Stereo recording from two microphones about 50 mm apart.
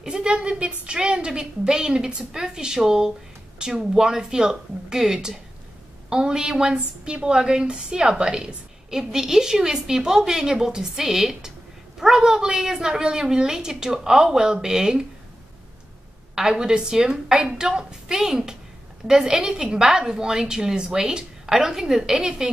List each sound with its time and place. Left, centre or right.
0.0 s a woman's voice: centre
16.3 s a woman's voice: centre